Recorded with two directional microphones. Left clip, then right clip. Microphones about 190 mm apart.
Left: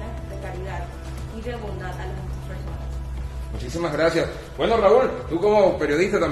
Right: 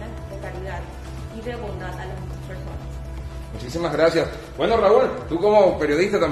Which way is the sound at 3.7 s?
15° right (ahead or behind).